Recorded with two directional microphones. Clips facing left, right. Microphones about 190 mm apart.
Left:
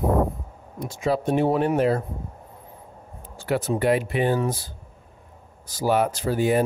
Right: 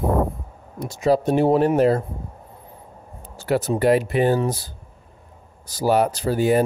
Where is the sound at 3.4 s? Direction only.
40° right (ahead or behind).